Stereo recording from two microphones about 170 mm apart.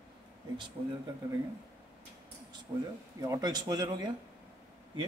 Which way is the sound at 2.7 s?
25° right (ahead or behind).